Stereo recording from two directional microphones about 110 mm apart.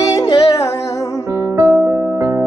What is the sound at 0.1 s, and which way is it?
Music, 35° left (ahead or behind).